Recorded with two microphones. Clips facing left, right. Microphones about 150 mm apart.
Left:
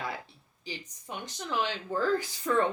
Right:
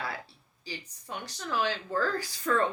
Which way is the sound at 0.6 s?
20° left (ahead or behind).